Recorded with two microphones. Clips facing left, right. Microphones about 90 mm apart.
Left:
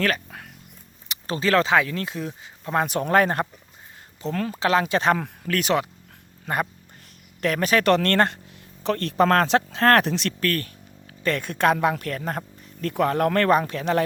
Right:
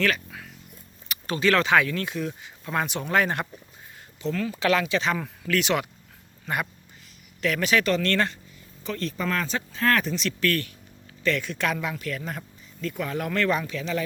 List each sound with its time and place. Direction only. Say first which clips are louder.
0.0 s a sound: left 1 dB; 45° left (ahead or behind)
1.0 s a sound: left 1 dB; 20° left (ahead or behind)
1.4 s speech: left 1 dB; 35° left (ahead or behind)
4.9 s speech: left 5 dB; 50° left (ahead or behind)
7.9 s speech: left 5 dB; 55° left (ahead or behind)
10.4 s speech: even; 40° left (ahead or behind)